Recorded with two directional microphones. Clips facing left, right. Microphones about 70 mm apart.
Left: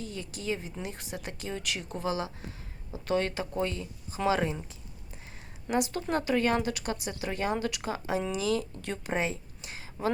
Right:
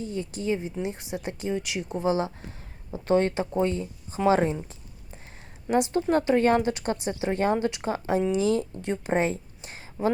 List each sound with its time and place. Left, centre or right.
0.0 s speech: right
5.7 s speech: right
9.1 s a sound: right